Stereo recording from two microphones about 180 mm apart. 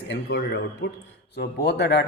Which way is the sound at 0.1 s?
75° left (ahead or behind).